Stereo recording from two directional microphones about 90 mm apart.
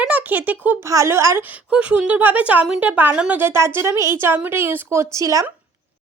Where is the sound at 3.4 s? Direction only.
30° right (ahead or behind).